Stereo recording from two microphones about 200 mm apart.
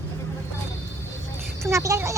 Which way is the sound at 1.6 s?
15° right (ahead or behind).